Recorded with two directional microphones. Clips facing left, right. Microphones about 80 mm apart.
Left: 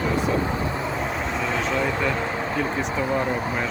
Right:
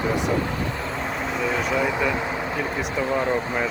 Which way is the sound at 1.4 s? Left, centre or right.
Centre.